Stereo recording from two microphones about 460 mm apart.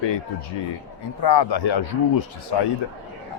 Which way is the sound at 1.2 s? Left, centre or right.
Left.